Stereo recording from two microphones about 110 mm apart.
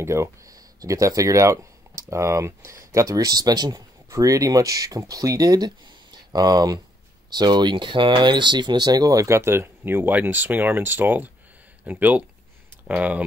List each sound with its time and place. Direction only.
0.0 s speech: 25° right (ahead or behind)